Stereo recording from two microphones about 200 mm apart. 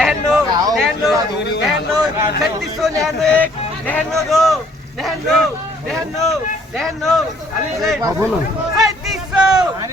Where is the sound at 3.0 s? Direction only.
Centre (ahead or behind).